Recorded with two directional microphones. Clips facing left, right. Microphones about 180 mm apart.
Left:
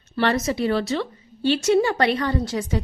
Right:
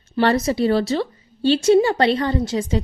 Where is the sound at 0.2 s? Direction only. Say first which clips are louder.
Right 4 dB; 30° right (ahead or behind).